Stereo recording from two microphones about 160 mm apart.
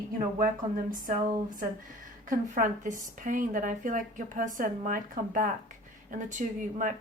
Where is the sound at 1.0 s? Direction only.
60° right (ahead or behind).